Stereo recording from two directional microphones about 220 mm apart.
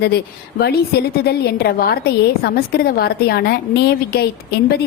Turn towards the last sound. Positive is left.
turn(degrees=45)  # may be behind; listen again after turning